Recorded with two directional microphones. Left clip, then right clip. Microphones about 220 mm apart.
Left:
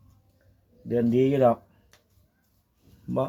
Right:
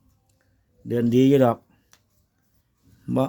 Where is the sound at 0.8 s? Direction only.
45° right (ahead or behind).